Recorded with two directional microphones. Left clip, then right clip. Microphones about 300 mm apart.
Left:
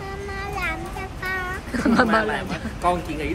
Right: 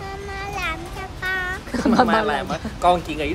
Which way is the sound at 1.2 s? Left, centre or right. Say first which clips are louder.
Right 3 dB; centre.